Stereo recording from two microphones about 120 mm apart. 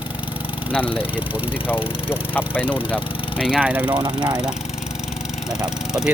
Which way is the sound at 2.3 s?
15° left (ahead or behind).